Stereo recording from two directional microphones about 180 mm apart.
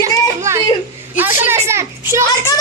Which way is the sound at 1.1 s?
10° right (ahead or behind).